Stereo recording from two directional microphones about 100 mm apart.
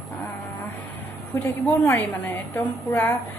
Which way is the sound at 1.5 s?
20° left (ahead or behind).